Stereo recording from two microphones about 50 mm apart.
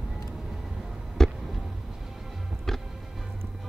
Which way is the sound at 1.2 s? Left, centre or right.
Centre.